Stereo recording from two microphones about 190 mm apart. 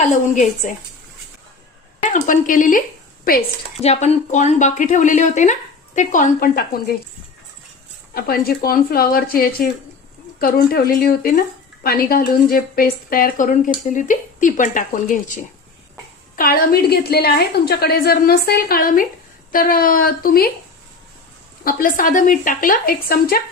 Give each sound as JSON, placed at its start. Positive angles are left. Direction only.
{"t": 0.0, "sound": "speech", "side_deg": 40}
{"t": 2.0, "sound": "a woman's voice", "side_deg": 40}
{"t": 3.8, "sound": "speech", "side_deg": 35}
{"t": 8.1, "sound": "a woman's voice", "side_deg": 50}
{"t": 16.3, "sound": "a woman's voice", "side_deg": 50}
{"t": 21.6, "sound": "a woman's voice", "side_deg": 50}